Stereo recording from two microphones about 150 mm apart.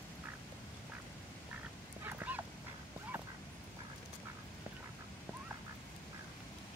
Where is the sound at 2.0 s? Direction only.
10° right (ahead or behind).